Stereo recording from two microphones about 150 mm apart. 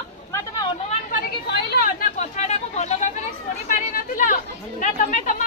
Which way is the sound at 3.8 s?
60° left (ahead or behind).